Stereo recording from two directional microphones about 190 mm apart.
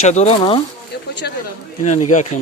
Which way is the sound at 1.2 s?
60° left (ahead or behind).